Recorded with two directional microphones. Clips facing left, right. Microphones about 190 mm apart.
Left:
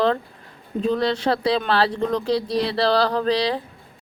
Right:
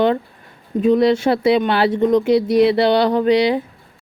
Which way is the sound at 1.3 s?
15° right (ahead or behind).